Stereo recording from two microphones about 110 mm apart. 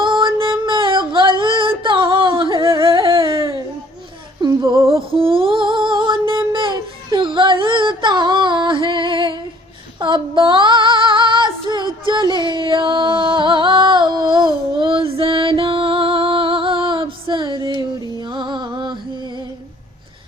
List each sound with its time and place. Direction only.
0.0 s a sound: 45° right (ahead or behind)
0.3 s music: 50° right (ahead or behind)
4.4 s female singing: 40° right (ahead or behind)
4.9 s music: 55° right (ahead or behind)
10.0 s female singing: 45° right (ahead or behind)
17.7 s music: 40° right (ahead or behind)